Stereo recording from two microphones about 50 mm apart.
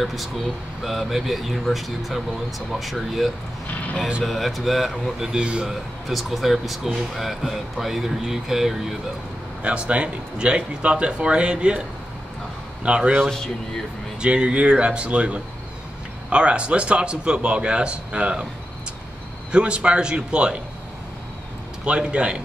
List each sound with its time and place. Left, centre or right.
0.0 s speech: centre
5.3 s a man's voice: centre
5.7 s speech: centre
9.6 s a man's voice: right
12.8 s a man's voice: right
14.2 s a man's voice: right
19.5 s a man's voice: right
21.8 s a man's voice: right